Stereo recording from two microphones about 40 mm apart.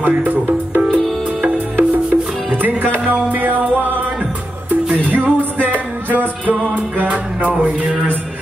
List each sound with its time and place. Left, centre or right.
0.0 s speech: right
0.9 s music: right
2.5 s music: right
3.1 s speech: right
4.9 s music: right